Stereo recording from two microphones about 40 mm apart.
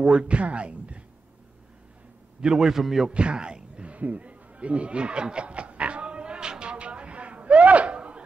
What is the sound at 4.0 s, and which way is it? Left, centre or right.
Snicker, right.